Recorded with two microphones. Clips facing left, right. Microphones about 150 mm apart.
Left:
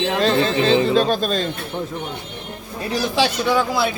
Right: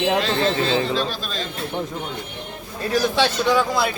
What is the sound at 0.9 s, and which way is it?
Speech, 45° left (ahead or behind).